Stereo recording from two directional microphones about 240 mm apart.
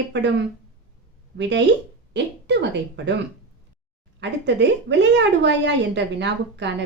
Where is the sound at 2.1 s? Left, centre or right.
Right.